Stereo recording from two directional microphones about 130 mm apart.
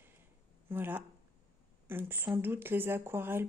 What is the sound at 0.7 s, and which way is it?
Speech, 15° right (ahead or behind).